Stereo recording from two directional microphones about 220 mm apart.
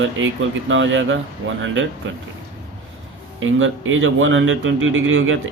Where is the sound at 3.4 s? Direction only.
60° right (ahead or behind).